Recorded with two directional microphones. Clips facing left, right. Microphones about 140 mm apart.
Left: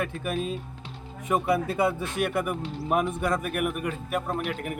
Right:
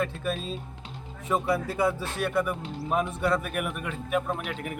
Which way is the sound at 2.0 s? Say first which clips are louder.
Even; 55° left (ahead or behind).